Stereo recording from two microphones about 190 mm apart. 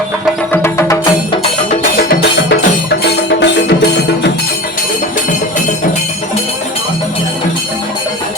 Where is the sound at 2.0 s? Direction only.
60° left (ahead or behind).